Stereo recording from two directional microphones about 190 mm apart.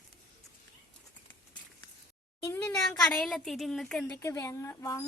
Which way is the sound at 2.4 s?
15° left (ahead or behind).